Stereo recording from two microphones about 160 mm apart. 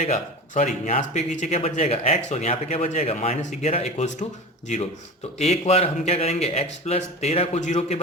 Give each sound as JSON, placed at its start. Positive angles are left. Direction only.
{"t": 0.0, "sound": "a man's voice", "side_deg": 50}